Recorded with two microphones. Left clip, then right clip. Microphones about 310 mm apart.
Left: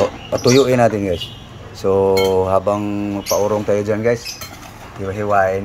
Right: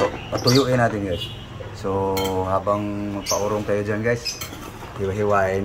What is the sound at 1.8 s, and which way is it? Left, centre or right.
Cutlery, left.